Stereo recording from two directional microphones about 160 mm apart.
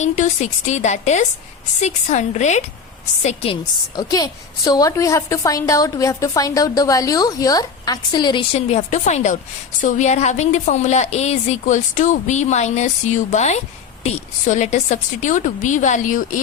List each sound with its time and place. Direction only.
0.0 s a woman's voice: 45° left (ahead or behind)
3.2 s a woman's voice: 35° left (ahead or behind)
3.9 s a woman's voice: 25° left (ahead or behind); by 16.4 s 55° left (ahead or behind)